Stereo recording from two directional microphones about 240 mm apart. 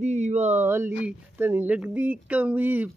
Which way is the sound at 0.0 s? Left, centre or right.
Right.